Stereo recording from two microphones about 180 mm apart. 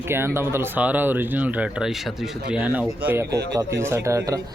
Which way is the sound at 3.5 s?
20° right (ahead or behind).